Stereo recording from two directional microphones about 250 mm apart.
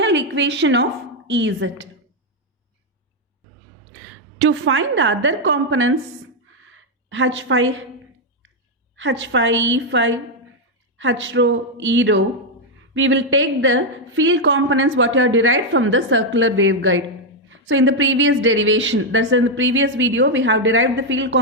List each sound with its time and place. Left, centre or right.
0.0 s a sound: right
1.3 s a woman's voice: right
4.4 s a woman's voice: right
9.0 s a woman's voice: right